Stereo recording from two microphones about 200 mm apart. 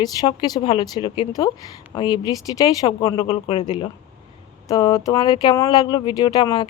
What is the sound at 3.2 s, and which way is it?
Speech, 30° left (ahead or behind).